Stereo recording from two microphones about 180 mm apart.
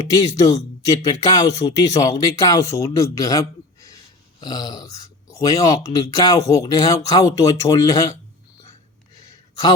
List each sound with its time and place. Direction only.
0.1 s speech: 20° left (ahead or behind)